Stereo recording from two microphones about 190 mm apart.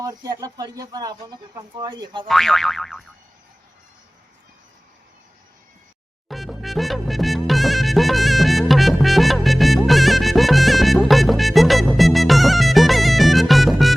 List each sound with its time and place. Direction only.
0.0 s speech: 20° right (ahead or behind)
2.2 s boing: centre (ahead or behind)
6.2 s music: centre (ahead or behind)